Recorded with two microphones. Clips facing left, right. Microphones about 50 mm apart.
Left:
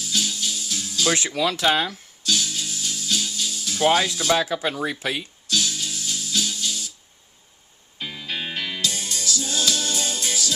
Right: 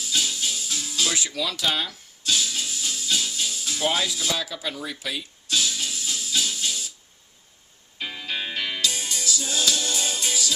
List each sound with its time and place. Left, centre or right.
0.1 s music: centre
1.0 s speech: left
1.3 s speech: left
2.2 s music: right
3.8 s speech: left
5.5 s music: centre
8.0 s music: centre
8.4 s music: centre
8.9 s music: centre